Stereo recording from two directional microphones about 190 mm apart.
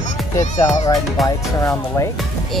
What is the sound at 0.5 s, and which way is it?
Speech, 40° left (ahead or behind).